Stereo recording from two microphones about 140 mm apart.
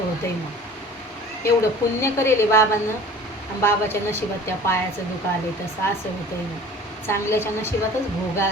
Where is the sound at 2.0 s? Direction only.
20° left (ahead or behind).